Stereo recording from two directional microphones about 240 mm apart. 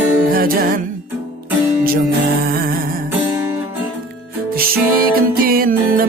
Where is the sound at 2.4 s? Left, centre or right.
Right.